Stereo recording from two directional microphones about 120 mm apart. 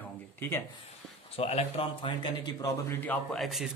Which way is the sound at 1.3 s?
55° left (ahead or behind).